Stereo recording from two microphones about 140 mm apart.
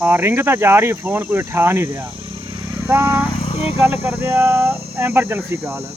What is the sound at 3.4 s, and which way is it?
Cricket, 45° left (ahead or behind).